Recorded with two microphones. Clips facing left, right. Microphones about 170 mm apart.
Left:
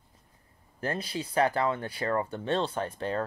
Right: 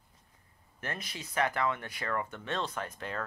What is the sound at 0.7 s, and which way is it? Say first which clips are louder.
Speech: left 8 dB; 30° left (ahead or behind).